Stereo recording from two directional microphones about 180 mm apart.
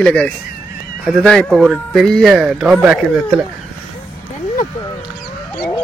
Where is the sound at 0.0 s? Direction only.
5° left (ahead or behind).